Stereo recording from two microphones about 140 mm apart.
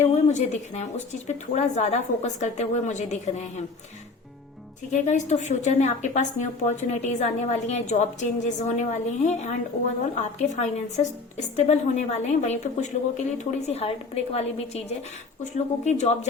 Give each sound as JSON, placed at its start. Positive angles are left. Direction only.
{"t": 0.1, "sound": "a woman's voice", "side_deg": 55}
{"t": 4.9, "sound": "a woman's voice", "side_deg": 55}